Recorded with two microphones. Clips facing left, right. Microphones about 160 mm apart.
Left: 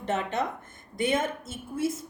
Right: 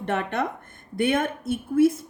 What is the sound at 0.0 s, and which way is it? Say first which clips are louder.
A woman's voice: right 2 dB; 60° right (ahead or behind).